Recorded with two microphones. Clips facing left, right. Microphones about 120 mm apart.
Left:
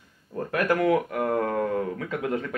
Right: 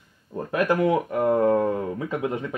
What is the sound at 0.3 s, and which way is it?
Speech, 20° right (ahead or behind).